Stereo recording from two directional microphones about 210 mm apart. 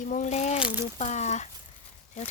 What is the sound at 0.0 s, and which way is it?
Speech, 35° left (ahead or behind).